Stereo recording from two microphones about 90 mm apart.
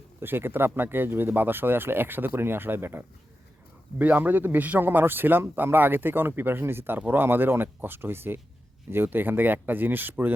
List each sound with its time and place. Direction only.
0.2 s speech: 25° right (ahead or behind)